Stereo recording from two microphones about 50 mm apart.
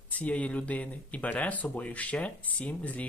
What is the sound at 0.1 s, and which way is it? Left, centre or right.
Speech, left.